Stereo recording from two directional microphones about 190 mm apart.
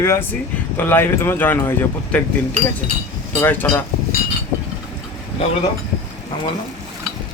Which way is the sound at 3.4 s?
10° left (ahead or behind).